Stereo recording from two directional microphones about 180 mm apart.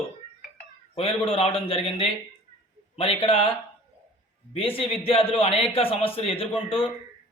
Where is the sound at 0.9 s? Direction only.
35° left (ahead or behind).